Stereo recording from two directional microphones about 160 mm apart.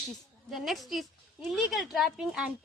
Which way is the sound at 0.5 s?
Centre (ahead or behind).